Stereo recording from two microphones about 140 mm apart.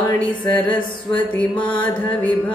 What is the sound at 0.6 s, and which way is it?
Music, 35° left (ahead or behind).